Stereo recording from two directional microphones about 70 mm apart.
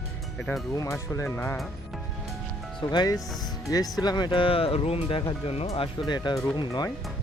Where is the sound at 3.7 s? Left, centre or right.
Left.